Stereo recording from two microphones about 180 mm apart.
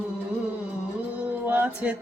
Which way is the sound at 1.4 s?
10° right (ahead or behind).